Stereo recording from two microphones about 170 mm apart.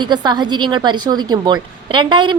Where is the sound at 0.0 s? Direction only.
25° right (ahead or behind).